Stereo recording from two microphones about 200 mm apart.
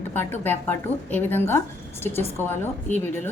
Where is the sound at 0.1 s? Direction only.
10° left (ahead or behind).